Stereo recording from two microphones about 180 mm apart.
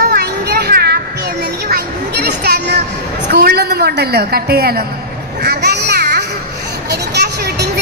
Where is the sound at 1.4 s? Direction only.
60° right (ahead or behind).